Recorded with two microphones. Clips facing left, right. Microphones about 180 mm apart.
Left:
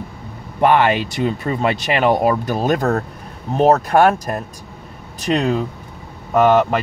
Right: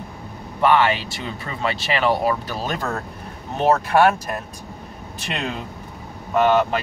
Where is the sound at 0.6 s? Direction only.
50° left (ahead or behind).